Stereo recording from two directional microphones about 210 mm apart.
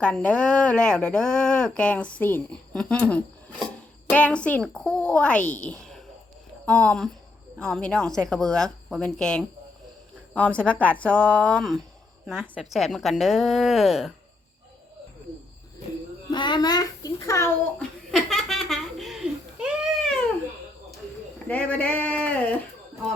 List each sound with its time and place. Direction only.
0.0 s a woman's voice: 5° left (ahead or behind)
16.3 s a child's voice: 20° left (ahead or behind)
18.1 s laughter: centre (ahead or behind)
19.5 s a sound: 5° right (ahead or behind)